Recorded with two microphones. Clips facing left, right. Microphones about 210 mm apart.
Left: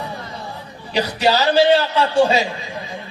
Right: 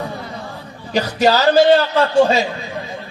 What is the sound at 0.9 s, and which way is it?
A man's voice, 40° right (ahead or behind).